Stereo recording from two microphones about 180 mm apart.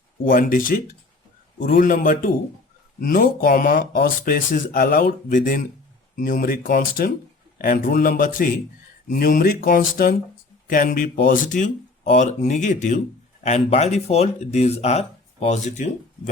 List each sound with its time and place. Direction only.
0.3 s speech: 50° left (ahead or behind)
5.3 s speech: 50° left (ahead or behind)